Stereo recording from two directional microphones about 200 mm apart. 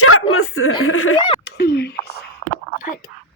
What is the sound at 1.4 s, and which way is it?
Speech, 50° left (ahead or behind).